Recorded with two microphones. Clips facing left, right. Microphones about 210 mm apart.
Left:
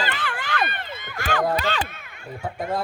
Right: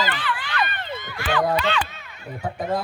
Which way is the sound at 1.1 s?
45° left (ahead or behind).